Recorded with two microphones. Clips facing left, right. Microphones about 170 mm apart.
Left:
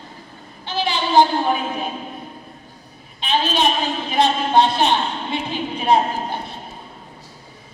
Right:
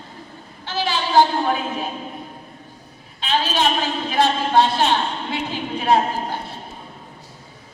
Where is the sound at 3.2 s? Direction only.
20° left (ahead or behind).